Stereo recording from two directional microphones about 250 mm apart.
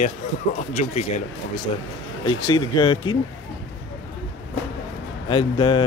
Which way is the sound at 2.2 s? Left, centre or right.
Centre.